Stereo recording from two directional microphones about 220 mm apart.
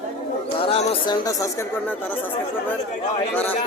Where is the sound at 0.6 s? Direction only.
25° left (ahead or behind).